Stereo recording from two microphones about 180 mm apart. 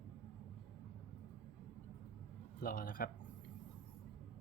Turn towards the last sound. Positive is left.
turn(degrees=50)  # may be behind; listen again after turning